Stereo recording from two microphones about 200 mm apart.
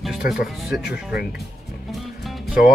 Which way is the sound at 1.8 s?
Centre (ahead or behind).